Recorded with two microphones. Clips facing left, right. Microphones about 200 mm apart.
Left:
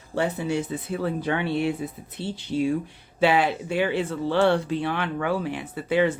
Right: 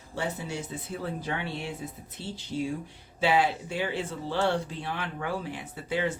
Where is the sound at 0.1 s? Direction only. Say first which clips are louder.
Left 8 dB; 65° left (ahead or behind).